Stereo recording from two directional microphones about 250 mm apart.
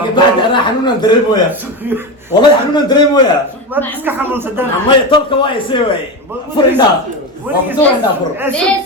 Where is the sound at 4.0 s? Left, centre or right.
Centre.